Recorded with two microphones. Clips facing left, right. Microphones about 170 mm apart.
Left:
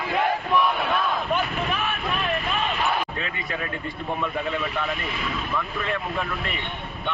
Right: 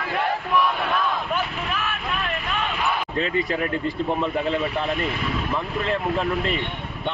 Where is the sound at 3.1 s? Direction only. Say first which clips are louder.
Right 8 dB; 30° right (ahead or behind).